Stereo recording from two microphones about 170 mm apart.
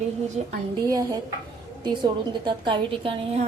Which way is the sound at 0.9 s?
20° right (ahead or behind).